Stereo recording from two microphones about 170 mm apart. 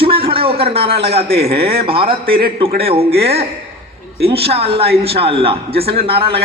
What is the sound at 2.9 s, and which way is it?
A man's voice, 35° right (ahead or behind).